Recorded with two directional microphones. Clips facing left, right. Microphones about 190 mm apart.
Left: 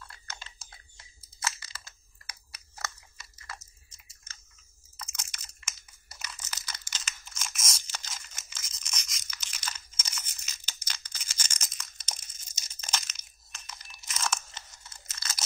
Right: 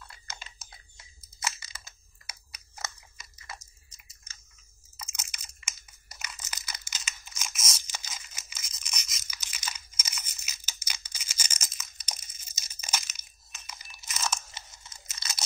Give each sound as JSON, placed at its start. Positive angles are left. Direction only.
{"t": 0.1, "sound": "chewing", "side_deg": -15}
{"t": 1.4, "sound": "crushing", "side_deg": -15}
{"t": 2.5, "sound": "a sound", "side_deg": -20}